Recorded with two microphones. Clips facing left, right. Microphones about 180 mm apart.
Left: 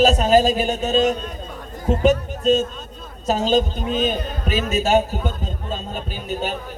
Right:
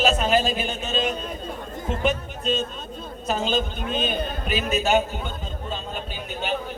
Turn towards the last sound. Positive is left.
turn(degrees=40)  # may be behind; listen again after turning